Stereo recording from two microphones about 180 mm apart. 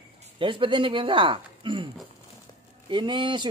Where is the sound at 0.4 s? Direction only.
30° right (ahead or behind).